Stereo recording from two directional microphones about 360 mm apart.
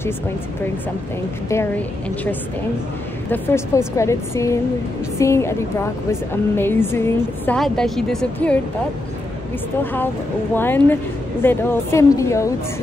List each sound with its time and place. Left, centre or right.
1.5 s a woman's voice: centre
3.3 s a woman's voice: centre
9.9 s a woman's voice: centre